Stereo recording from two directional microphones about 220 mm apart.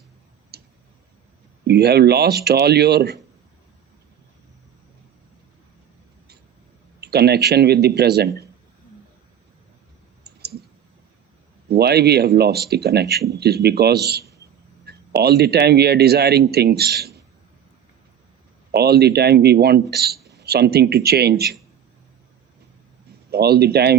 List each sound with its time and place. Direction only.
0.5 s tick-tock: 45° right (ahead or behind)
1.6 s speech: 45° right (ahead or behind)
7.0 s speech: 45° right (ahead or behind)
10.3 s clicking: 45° right (ahead or behind)
11.7 s speech: 45° right (ahead or behind)
18.7 s speech: 45° right (ahead or behind)
23.3 s speech: 45° right (ahead or behind)